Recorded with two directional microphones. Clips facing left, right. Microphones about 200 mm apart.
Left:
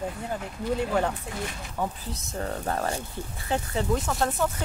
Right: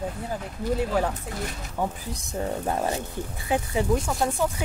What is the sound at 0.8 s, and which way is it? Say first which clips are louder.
Speech: even; 5° right (ahead or behind).